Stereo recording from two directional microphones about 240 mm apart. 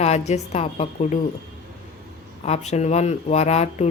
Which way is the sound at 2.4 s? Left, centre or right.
Left.